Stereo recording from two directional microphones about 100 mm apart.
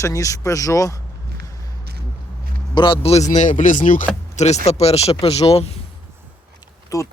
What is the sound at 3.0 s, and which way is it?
Speech, 90° left.